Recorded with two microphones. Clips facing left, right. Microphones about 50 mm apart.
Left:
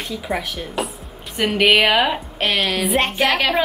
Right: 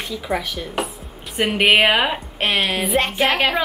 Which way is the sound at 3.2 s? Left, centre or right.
Centre.